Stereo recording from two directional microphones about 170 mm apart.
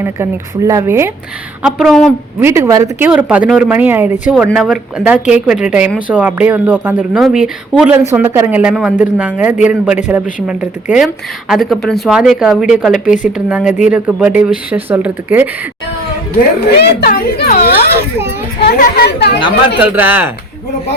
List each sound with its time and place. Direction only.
0.0 s a woman's voice: 15° right (ahead or behind)
1.6 s speech: centre (ahead or behind)
2.4 s a woman's voice: 15° right (ahead or behind)
3.1 s a woman's voice: 5° right (ahead or behind)
13.1 s speech: 50° left (ahead or behind)
13.3 s a woman's voice: 5° right (ahead or behind)
16.7 s a woman's voice: 70° left (ahead or behind)
19.8 s a woman's voice: 10° right (ahead or behind)